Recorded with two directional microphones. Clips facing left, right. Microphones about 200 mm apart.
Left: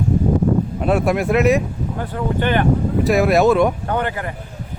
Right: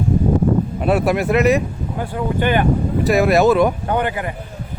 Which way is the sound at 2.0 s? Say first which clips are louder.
Right 1 dB; 10° right (ahead or behind).